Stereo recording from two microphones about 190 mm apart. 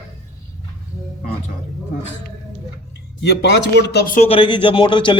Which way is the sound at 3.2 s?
65° left (ahead or behind).